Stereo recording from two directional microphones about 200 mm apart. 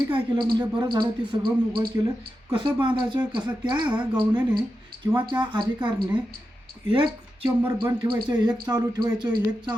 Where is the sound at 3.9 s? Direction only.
25° right (ahead or behind).